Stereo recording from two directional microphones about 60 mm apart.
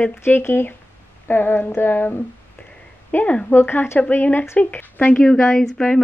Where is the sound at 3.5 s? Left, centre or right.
Left.